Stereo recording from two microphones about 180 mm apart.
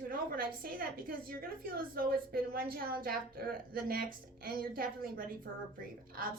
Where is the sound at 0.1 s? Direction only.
55° right (ahead or behind).